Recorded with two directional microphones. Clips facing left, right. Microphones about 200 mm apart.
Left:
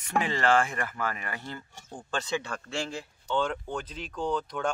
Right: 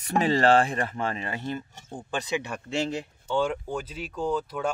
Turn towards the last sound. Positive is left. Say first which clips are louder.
# right 2 dB
turn(degrees=-5)  # may be behind; listen again after turning